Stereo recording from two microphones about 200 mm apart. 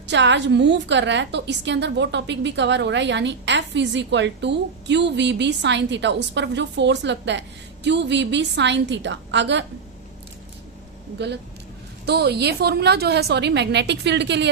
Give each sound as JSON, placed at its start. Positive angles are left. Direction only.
{"t": 0.1, "sound": "a woman's voice", "side_deg": -60}
{"t": 12.0, "sound": "a woman's voice", "side_deg": -55}